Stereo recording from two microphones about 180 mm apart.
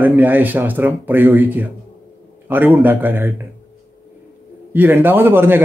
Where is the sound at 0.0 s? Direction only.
10° right (ahead or behind).